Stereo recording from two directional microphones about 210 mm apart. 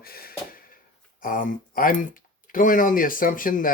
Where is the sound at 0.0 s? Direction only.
45° left (ahead or behind).